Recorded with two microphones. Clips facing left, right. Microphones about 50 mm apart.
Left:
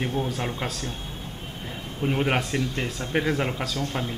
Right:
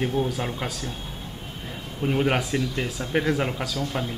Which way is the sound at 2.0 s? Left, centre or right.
Centre.